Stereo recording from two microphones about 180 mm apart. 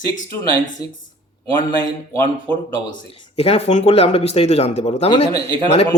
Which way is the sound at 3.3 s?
35° left (ahead or behind).